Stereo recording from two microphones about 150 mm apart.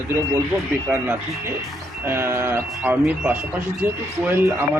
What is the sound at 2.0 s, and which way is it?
Speech, 20° right (ahead or behind).